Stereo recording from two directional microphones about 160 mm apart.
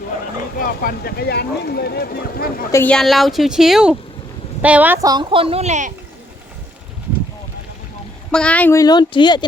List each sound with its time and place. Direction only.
0.6 s speech: 65° left (ahead or behind)
2.7 s speech: 10° left (ahead or behind); by 4.9 s 10° right (ahead or behind)
5.0 s a woman's voice: 25° right (ahead or behind); by 5.9 s 45° right (ahead or behind)
8.3 s speech: 5° left (ahead or behind)
8.8 s speech: 25° left (ahead or behind)